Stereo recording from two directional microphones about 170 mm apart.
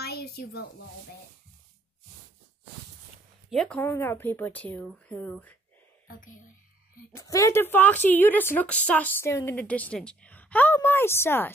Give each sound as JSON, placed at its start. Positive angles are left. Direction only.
{"t": 0.0, "sound": "a sound", "side_deg": 70}
{"t": 3.4, "sound": "a woman's voice", "side_deg": 5}
{"t": 7.1, "sound": "a woman's voice", "side_deg": 15}